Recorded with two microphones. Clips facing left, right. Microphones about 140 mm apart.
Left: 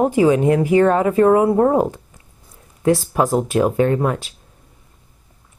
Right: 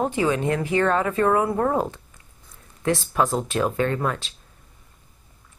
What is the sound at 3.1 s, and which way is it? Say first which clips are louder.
Speech: left 5 dB; 25° left (ahead or behind).